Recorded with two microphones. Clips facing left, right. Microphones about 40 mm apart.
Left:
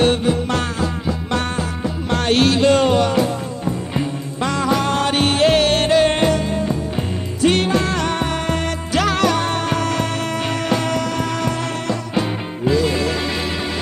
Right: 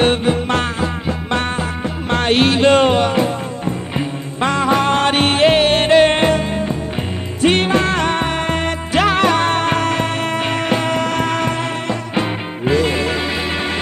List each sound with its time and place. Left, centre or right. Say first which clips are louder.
0.0 s music: right 1 dB; right
11.1 s music: right 3 dB; right